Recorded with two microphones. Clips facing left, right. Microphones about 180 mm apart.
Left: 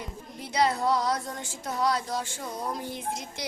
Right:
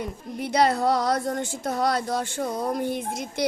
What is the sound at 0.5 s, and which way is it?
Speech, 65° right (ahead or behind).